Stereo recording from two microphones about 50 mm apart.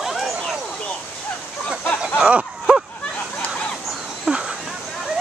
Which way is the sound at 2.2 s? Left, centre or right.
Centre.